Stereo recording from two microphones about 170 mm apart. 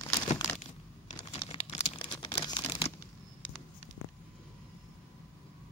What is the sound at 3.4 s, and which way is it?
Patter, 10° left (ahead or behind).